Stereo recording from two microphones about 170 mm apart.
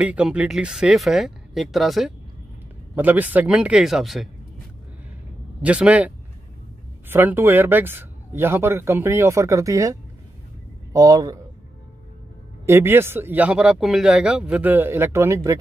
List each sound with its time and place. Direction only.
0.0 s speech: 5° right (ahead or behind)
5.6 s speech: 5° right (ahead or behind)
12.6 s speech: 15° right (ahead or behind)